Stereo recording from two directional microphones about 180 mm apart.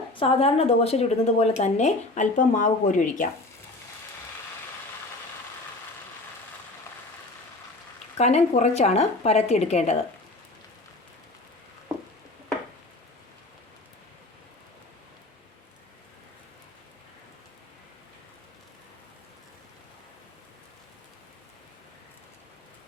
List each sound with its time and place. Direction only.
0.1 s speech: 30° left (ahead or behind); by 3.2 s 45° left (ahead or behind)
8.2 s speech: 40° left (ahead or behind)